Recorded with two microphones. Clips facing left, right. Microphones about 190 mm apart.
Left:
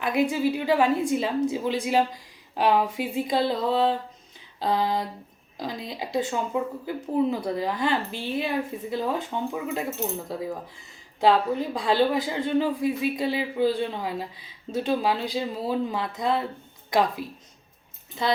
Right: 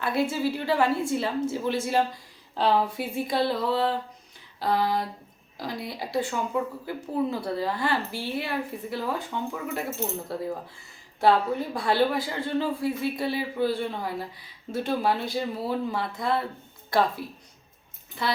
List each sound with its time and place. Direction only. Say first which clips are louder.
0.0 s a woman's voice: left 2 dB; 15° left (ahead or behind)